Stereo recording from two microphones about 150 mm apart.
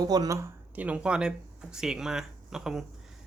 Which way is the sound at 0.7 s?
10° right (ahead or behind).